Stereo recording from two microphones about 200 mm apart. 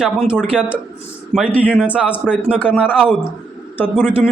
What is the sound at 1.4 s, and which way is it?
Speech, 5° left (ahead or behind).